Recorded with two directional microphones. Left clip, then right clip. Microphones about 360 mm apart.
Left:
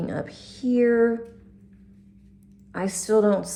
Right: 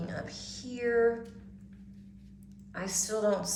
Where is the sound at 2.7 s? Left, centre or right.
Centre.